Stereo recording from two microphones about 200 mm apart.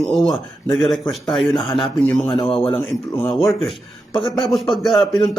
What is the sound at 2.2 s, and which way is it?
Speech, 25° left (ahead or behind).